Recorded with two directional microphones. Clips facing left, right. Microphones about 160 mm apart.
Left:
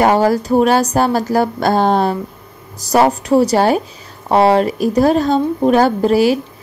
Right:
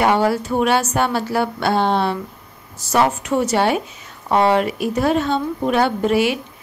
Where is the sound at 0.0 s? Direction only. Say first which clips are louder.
Left 4 dB; 40° left (ahead or behind).